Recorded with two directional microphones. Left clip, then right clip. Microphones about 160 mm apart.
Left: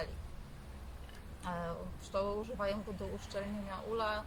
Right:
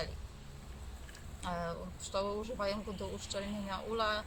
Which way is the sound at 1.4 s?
10° right (ahead or behind).